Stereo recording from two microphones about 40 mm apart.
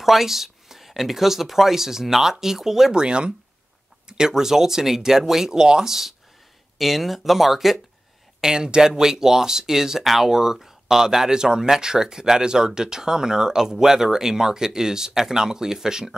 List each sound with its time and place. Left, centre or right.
0.0 s speech: centre
2.9 s speech: right
4.1 s speech: centre
6.8 s speech: centre
8.4 s speech: centre